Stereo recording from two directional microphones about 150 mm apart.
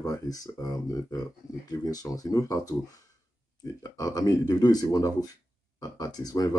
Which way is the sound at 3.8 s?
25° left (ahead or behind).